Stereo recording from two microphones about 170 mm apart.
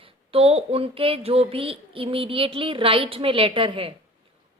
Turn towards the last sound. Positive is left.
turn(degrees=-30)  # may be behind; listen again after turning